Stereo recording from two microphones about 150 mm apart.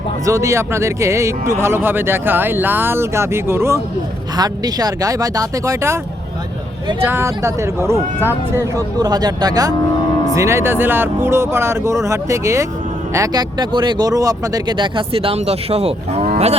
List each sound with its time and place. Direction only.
0.3 s speech: 20° right (ahead or behind)
7.0 s speech: 15° right (ahead or behind); by 16.3 s 45° right (ahead or behind)